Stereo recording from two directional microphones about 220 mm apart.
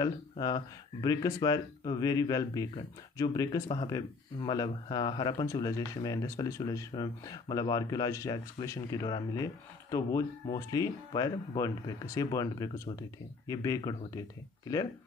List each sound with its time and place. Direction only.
0.0 s speech: 15° left (ahead or behind)